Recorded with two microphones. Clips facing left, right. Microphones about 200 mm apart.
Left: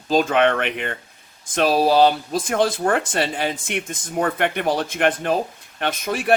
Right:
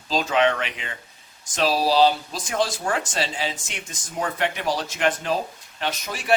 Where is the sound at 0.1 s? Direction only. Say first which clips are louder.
Left 4 dB; 55° left (ahead or behind).